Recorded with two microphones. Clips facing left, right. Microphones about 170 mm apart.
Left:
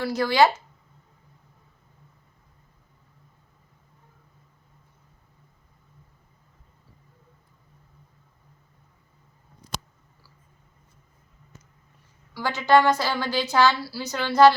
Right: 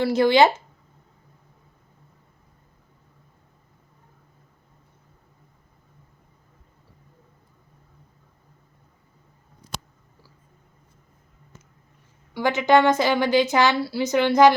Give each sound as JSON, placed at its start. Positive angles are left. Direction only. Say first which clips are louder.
{"t": 0.0, "sound": "a woman's voice", "louder": "right 4 dB", "side_deg": -25}
{"t": 12.3, "sound": "a woman's voice", "louder": "right 2 dB", "side_deg": -20}